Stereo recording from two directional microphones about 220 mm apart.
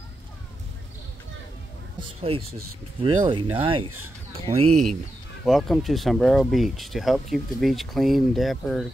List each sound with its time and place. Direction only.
2.0 s speech: 25° right (ahead or behind)
4.6 s speech: 90° right
5.4 s speech: centre (ahead or behind)